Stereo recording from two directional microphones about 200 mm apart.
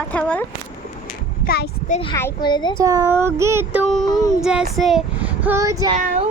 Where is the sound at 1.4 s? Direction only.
50° left (ahead or behind).